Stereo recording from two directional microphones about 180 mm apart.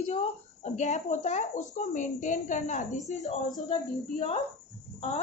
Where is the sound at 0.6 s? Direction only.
40° left (ahead or behind).